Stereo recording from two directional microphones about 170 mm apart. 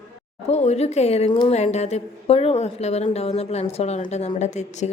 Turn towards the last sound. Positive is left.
turn(degrees=40)  # may be behind; listen again after turning